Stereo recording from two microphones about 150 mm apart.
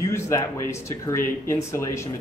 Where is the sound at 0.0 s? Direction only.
20° left (ahead or behind).